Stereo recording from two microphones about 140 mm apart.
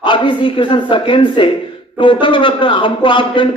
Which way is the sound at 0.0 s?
35° left (ahead or behind).